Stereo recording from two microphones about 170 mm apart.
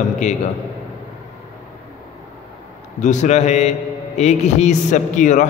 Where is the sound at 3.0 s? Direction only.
45° left (ahead or behind).